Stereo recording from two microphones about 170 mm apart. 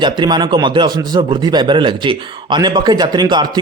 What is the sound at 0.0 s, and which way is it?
Speech, 25° right (ahead or behind).